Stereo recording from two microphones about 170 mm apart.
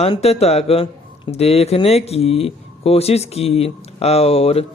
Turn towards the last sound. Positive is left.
turn(degrees=35)  # may be behind; listen again after turning